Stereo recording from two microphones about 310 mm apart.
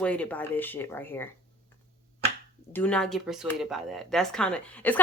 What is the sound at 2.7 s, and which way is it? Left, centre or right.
Speech, centre.